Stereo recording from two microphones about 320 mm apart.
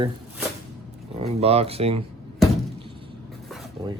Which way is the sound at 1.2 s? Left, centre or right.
Centre.